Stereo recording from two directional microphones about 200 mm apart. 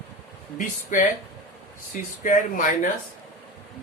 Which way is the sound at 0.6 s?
40° left (ahead or behind).